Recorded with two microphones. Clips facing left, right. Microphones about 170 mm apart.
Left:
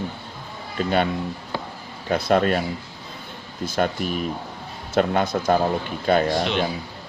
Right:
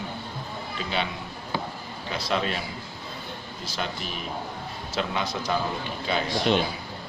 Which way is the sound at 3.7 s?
50° left (ahead or behind).